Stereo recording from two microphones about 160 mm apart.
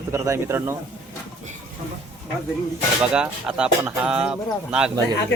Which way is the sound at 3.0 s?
5° right (ahead or behind).